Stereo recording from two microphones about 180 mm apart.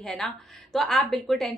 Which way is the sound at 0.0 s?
Centre (ahead or behind).